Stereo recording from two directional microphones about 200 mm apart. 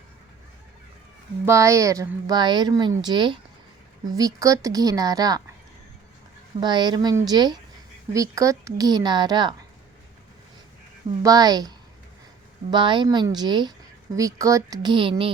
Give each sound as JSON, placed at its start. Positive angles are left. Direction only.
{"t": 1.5, "sound": "a woman's voice", "side_deg": -15}
{"t": 6.6, "sound": "a woman's voice", "side_deg": -20}
{"t": 11.2, "sound": "a woman's voice", "side_deg": -20}
{"t": 12.7, "sound": "a woman's voice", "side_deg": -25}